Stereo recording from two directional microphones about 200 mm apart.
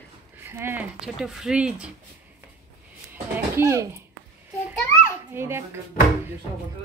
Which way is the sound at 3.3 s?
15° right (ahead or behind).